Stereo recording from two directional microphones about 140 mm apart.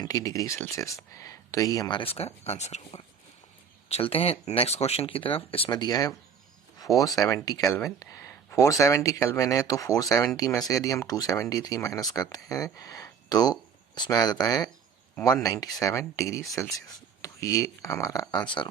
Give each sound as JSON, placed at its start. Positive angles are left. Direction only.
{"t": 0.0, "sound": "speech", "side_deg": 25}
{"t": 5.7, "sound": "speech", "side_deg": 30}
{"t": 7.2, "sound": "speech", "side_deg": 25}